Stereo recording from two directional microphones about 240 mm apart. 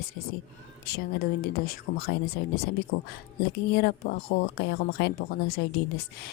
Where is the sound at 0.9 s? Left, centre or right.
Left.